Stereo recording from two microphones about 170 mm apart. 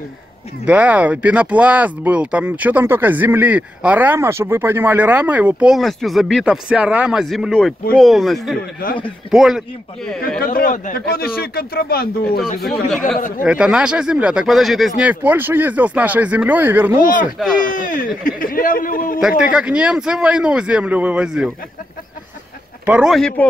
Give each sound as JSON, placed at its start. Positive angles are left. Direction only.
{"t": 0.7, "sound": "speech", "side_deg": -10}
{"t": 10.4, "sound": "speech", "side_deg": 60}
{"t": 12.4, "sound": "speech", "side_deg": 0}
{"t": 17.6, "sound": "speech", "side_deg": 50}
{"t": 19.5, "sound": "speech", "side_deg": -5}
{"t": 22.8, "sound": "speech", "side_deg": -5}